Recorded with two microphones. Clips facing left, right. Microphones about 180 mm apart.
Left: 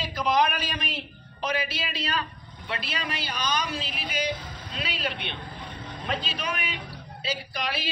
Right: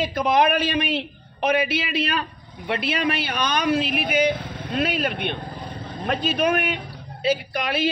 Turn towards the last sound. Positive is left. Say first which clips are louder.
# right 8 dB
turn(degrees=-55)  # may be behind; listen again after turning